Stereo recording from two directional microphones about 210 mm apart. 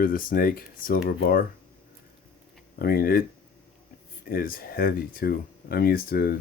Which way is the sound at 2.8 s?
45° left (ahead or behind).